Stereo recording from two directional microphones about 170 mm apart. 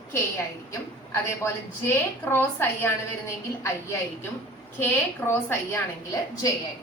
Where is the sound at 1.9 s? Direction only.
15° left (ahead or behind).